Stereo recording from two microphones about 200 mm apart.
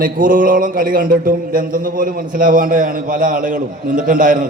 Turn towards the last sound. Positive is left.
turn(degrees=-45)  # may be behind; listen again after turning